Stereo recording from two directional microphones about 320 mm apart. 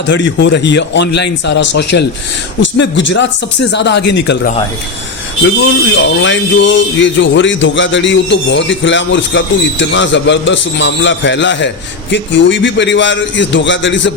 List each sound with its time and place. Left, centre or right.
0.1 s speech: left
5.9 s speech: left